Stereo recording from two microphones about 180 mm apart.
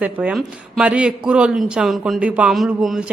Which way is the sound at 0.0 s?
5° right (ahead or behind).